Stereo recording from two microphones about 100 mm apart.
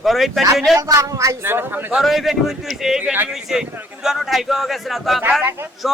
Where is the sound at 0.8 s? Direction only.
35° right (ahead or behind).